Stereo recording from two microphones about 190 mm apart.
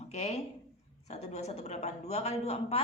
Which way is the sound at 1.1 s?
35° left (ahead or behind).